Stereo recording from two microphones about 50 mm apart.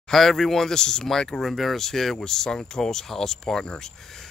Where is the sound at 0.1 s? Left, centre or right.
Centre.